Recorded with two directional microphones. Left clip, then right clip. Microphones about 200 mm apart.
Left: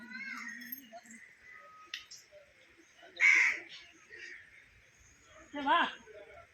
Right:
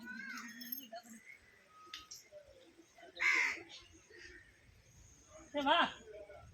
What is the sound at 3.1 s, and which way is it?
Crow, 30° right (ahead or behind).